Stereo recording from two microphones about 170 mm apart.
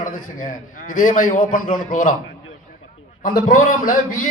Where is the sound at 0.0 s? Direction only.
55° left (ahead or behind).